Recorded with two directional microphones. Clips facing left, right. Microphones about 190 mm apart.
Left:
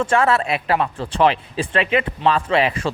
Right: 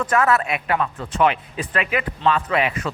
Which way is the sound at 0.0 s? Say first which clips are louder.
Left 2 dB; 30° left (ahead or behind).